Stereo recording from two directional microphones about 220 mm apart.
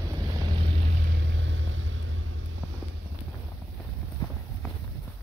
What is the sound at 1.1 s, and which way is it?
Vehicle, 55° right (ahead or behind).